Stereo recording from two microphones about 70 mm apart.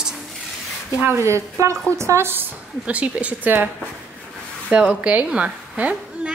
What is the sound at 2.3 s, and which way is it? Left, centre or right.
A woman's voice, right.